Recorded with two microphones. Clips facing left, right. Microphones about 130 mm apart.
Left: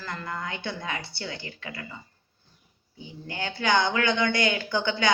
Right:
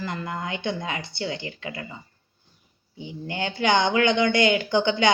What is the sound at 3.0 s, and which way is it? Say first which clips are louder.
Speech: right 5 dB; 20° right (ahead or behind).